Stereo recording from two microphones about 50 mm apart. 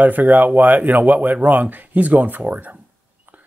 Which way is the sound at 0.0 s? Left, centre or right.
Right.